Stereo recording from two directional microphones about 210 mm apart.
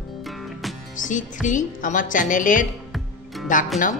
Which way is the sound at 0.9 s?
40° left (ahead or behind).